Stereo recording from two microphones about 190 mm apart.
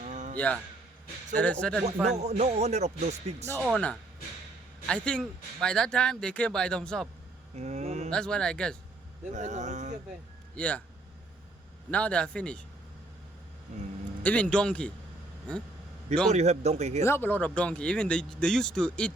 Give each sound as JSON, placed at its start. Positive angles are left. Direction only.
{"t": 0.0, "sound": "a sound", "side_deg": -40}
{"t": 0.3, "sound": "speech", "side_deg": 5}
{"t": 2.1, "sound": "speech", "side_deg": -35}
{"t": 3.6, "sound": "speech", "side_deg": 0}
{"t": 7.5, "sound": "a sound", "side_deg": -35}
{"t": 8.1, "sound": "speech", "side_deg": 5}
{"t": 9.3, "sound": "speech", "side_deg": -40}
{"t": 10.5, "sound": "speech", "side_deg": 5}
{"t": 11.9, "sound": "speech", "side_deg": 5}
{"t": 14.2, "sound": "speech", "side_deg": 5}
{"t": 16.3, "sound": "speech", "side_deg": -35}
{"t": 17.0, "sound": "speech", "side_deg": 10}